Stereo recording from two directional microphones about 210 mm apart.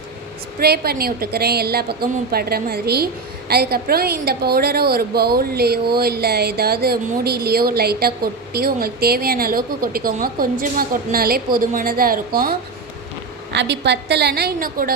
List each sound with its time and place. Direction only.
0.6 s a woman's voice: 50° right (ahead or behind)
13.5 s a woman's voice: 55° right (ahead or behind)